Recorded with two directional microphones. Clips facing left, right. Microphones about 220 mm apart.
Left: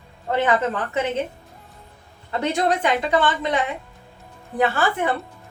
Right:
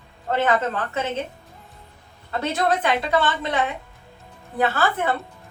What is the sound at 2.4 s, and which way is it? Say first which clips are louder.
A woman's voice: left 1 dB; 15° left (ahead or behind).